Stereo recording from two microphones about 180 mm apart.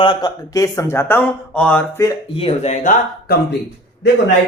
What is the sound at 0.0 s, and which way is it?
Speech, 25° left (ahead or behind).